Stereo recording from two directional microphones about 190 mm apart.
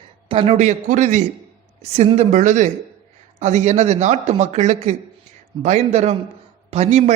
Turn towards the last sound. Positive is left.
turn(degrees=-35)  # may be behind; listen again after turning